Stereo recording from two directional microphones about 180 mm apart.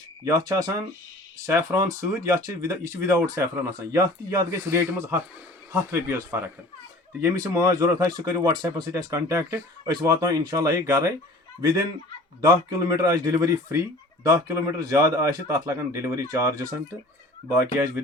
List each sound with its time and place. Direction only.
0.3 s speech: 20° right (ahead or behind)